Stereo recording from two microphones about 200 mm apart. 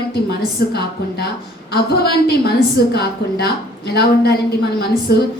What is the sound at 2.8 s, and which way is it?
A woman's voice, 50° left (ahead or behind).